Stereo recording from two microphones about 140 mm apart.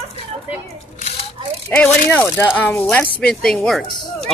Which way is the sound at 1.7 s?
10° left (ahead or behind).